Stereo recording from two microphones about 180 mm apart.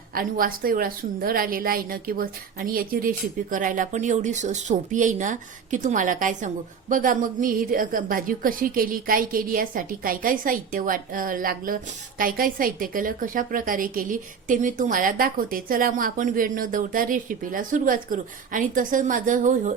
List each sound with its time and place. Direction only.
0.1 s a woman's voice: 55° right (ahead or behind)